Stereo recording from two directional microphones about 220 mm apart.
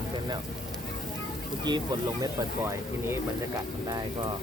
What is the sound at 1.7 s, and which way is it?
Speech, 20° right (ahead or behind).